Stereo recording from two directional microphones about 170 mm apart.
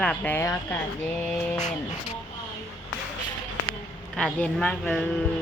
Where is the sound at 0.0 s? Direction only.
5° left (ahead or behind).